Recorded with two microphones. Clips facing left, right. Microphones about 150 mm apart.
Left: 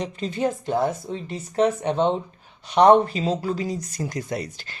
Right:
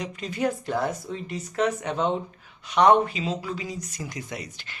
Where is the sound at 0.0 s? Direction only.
30° left (ahead or behind).